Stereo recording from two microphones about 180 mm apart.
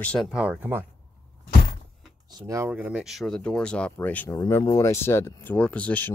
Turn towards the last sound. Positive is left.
turn(degrees=10)  # may be behind; listen again after turning